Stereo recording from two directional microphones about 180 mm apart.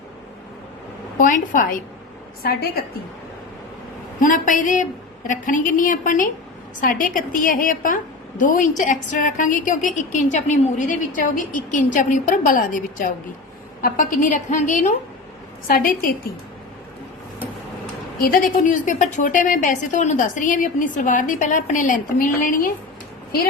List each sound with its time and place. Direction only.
1.2 s a woman's voice: 45° left (ahead or behind)
2.4 s a woman's voice: 60° left (ahead or behind)
4.2 s a woman's voice: 45° left (ahead or behind)
15.6 s a woman's voice: 55° left (ahead or behind)
18.2 s a woman's voice: 50° left (ahead or behind)